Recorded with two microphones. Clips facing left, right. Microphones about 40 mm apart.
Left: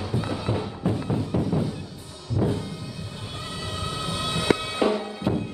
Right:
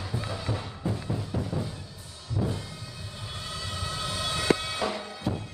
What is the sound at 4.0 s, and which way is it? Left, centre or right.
Music, centre.